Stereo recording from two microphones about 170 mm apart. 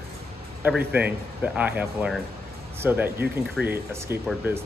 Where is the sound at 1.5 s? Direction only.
5° right (ahead or behind).